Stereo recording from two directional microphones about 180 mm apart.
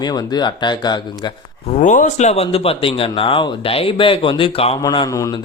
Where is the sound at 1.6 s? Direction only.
40° left (ahead or behind).